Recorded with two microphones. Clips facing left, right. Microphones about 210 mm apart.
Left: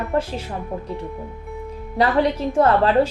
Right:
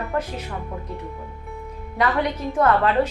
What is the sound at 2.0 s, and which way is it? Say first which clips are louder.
A woman's voice: left 4 dB; 30° left (ahead or behind).